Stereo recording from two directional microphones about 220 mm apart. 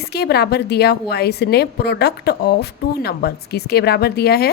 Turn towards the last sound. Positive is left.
turn(degrees=45)  # may be behind; listen again after turning